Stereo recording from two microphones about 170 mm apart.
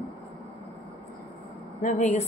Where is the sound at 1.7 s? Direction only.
45° left (ahead or behind).